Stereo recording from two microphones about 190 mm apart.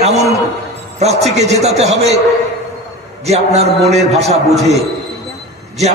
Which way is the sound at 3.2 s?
35° right (ahead or behind).